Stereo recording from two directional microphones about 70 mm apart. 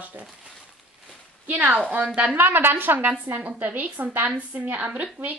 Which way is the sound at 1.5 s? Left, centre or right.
Right.